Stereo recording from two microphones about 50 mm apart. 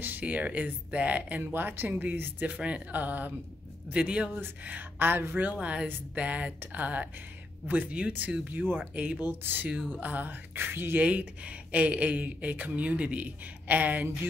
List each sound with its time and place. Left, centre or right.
0.2 s speech: right
1.5 s speech: right
2.4 s speech: right
3.9 s speech: right
4.4 s speech: right
8.5 s speech: right
8.9 s speech: right
9.2 s speech: right
11.0 s speech: right